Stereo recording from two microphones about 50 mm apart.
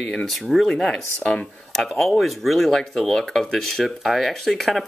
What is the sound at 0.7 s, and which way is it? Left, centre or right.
Speech, centre.